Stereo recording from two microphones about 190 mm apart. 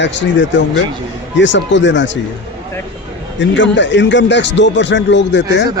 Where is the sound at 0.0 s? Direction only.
70° left (ahead or behind).